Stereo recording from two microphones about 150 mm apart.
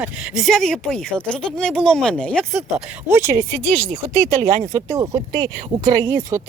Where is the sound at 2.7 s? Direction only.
20° right (ahead or behind).